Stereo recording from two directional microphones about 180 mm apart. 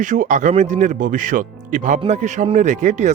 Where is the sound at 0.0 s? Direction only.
45° right (ahead or behind).